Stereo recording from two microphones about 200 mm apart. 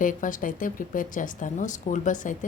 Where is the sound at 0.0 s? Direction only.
40° left (ahead or behind).